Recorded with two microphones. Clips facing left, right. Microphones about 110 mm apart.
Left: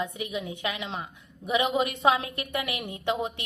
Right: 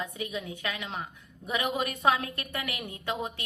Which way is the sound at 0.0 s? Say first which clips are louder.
Left 3 dB; 25° left (ahead or behind).